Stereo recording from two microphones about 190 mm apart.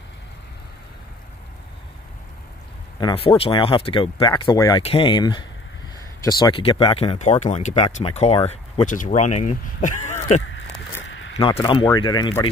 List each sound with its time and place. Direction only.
3.0 s speech: 25° left (ahead or behind)
11.1 s a sound: 85° left
11.3 s speech: 30° left (ahead or behind)